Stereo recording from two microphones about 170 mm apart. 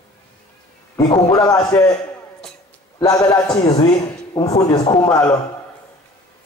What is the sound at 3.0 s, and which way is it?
A man's voice, 20° left (ahead or behind).